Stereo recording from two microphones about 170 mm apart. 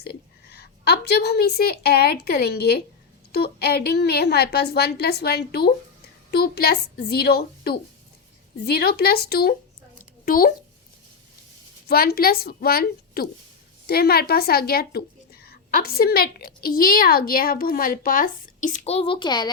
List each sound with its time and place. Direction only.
0.5 s a woman's voice: 70° left (ahead or behind)
10.2 s a woman's voice: 55° left (ahead or behind)
11.9 s a woman's voice: 65° left (ahead or behind); by 19.5 s 25° left (ahead or behind)